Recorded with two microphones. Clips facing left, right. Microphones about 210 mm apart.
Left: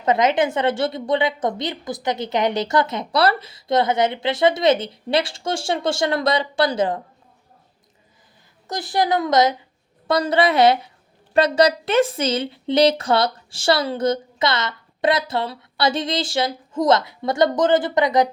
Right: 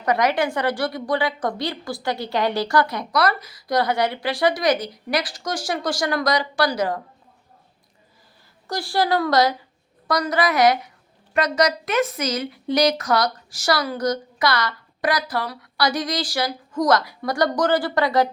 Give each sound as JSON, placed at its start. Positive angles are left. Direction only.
{"t": 0.0, "sound": "a woman's voice", "side_deg": 20}
{"t": 8.6, "sound": "a woman's voice", "side_deg": 20}